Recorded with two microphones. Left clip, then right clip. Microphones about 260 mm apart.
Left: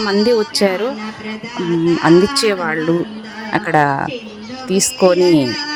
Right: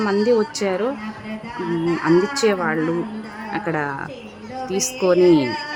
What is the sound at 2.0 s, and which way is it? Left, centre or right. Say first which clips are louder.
Speech: left 5 dB; left.